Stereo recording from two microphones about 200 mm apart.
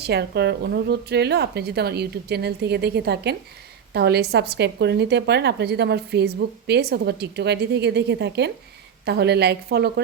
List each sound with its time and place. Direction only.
0.0 s speech: 55° right (ahead or behind)